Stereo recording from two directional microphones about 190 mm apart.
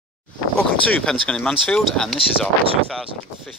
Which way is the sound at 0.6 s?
5° left (ahead or behind).